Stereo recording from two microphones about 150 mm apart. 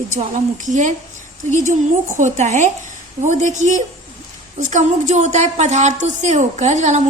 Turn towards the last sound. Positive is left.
turn(degrees=-50)  # may be behind; listen again after turning